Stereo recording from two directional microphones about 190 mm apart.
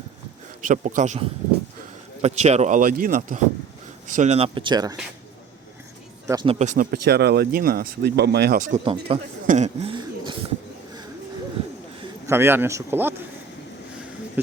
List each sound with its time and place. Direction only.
0.7 s speech: 40° right (ahead or behind); by 4.9 s 20° right (ahead or behind)
6.2 s speech: 25° right (ahead or behind)
6.9 s speech: 60° right (ahead or behind)
8.8 s speech: 30° right (ahead or behind)
12.2 s speech: 15° right (ahead or behind)
14.4 s speech: 10° right (ahead or behind)